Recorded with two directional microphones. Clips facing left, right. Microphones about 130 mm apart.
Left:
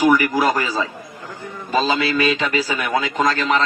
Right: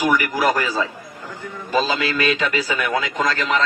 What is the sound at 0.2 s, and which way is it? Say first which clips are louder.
Speech: left 1 dB; 20° left (ahead or behind).